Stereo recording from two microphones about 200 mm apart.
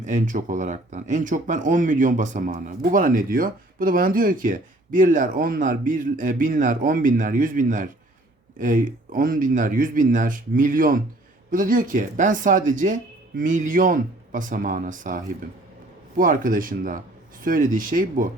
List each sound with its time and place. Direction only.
0.0 s speech: 40° right (ahead or behind)